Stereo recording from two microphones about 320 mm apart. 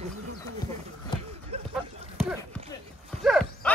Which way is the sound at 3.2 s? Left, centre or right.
Centre.